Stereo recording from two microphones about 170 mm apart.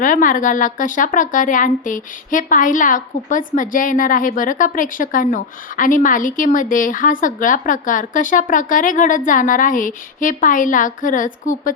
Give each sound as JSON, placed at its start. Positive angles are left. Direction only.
{"t": 0.0, "sound": "a woman's voice", "side_deg": 50}